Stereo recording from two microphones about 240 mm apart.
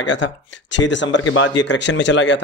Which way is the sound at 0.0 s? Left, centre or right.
Left.